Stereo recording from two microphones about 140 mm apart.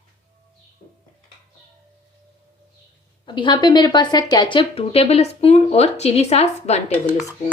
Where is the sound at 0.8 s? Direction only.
75° left (ahead or behind).